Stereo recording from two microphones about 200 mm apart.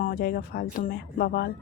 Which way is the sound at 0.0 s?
50° left (ahead or behind).